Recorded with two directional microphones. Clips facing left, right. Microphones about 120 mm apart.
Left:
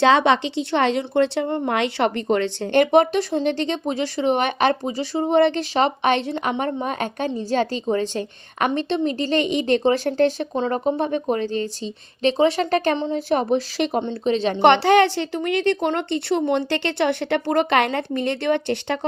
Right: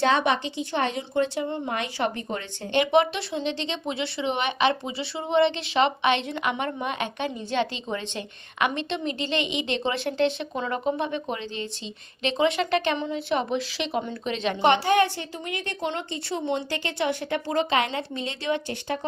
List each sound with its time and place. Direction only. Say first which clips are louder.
0.0 s speech: left 6 dB; 90° left
2.7 s speech: left 5 dB; 45° left (ahead or behind)
14.0 s speech: left 7 dB; 30° left (ahead or behind)
14.6 s a woman's voice: left 6 dB; 75° left (ahead or behind)